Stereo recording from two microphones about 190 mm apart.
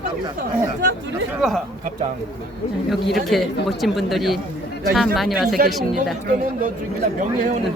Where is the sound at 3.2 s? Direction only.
Centre (ahead or behind).